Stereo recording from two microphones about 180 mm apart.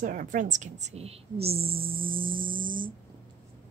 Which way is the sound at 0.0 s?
45° right (ahead or behind).